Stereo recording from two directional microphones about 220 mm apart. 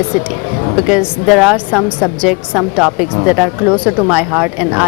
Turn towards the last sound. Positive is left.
turn(degrees=-5)  # may be behind; listen again after turning